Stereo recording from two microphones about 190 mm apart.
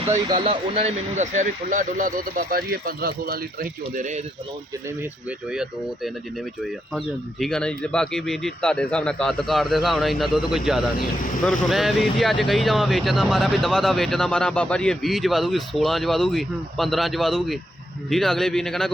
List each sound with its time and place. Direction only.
0.3 s speech: 30° right (ahead or behind)
5.5 s speech: 5° right (ahead or behind)